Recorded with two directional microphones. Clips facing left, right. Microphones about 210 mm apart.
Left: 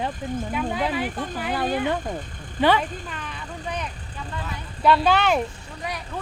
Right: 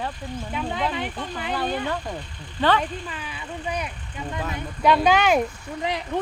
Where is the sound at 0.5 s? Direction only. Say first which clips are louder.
Even; 5° left (ahead or behind).